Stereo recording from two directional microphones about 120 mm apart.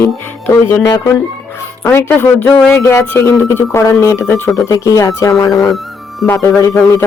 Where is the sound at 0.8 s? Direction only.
35° left (ahead or behind).